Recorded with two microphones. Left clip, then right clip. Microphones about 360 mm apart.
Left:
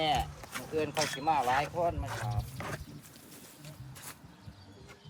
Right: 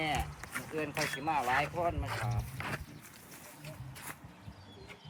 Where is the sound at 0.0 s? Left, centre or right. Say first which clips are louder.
Left 4 dB; left.